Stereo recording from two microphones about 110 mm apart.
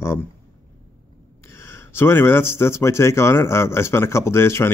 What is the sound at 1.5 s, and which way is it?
Speech, 25° left (ahead or behind).